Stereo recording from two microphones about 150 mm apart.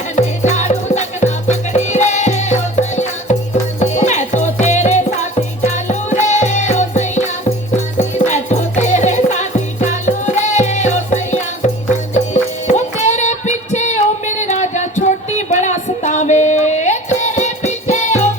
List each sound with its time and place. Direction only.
0.2 s music: 50° left (ahead or behind)